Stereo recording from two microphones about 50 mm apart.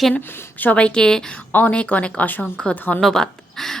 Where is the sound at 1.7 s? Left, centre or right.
Left.